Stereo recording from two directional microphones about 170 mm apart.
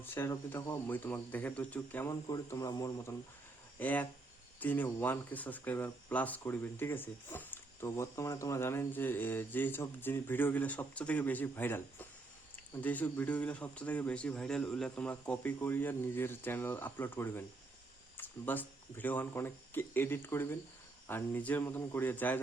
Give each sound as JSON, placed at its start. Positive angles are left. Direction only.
{"t": 0.0, "sound": "speech", "side_deg": 15}
{"t": 2.2, "sound": "a man's voice", "side_deg": 20}